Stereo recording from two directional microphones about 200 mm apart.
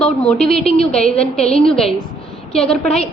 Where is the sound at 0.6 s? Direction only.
30° left (ahead or behind).